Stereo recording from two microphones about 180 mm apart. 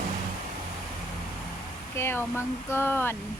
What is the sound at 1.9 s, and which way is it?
Speech, 15° left (ahead or behind).